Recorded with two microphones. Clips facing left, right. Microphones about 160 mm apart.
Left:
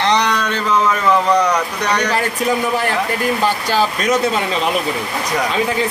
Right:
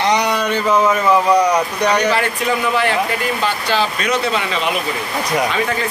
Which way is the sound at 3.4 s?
40° left (ahead or behind).